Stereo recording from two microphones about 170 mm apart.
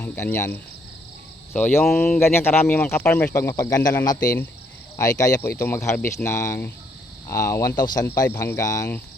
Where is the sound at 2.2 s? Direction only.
15° left (ahead or behind).